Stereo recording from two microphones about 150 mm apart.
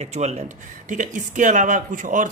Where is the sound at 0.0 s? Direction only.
50° right (ahead or behind).